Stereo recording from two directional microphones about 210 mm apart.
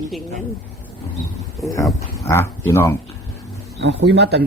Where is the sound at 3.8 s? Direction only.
55° right (ahead or behind).